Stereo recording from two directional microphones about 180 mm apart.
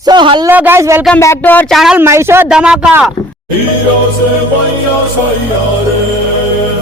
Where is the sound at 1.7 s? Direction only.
5° right (ahead or behind).